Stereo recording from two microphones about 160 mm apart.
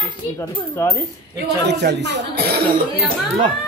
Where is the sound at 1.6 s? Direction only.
90° right.